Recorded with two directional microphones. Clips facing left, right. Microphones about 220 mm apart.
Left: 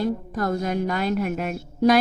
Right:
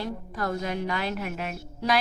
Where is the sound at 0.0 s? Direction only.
45° left (ahead or behind).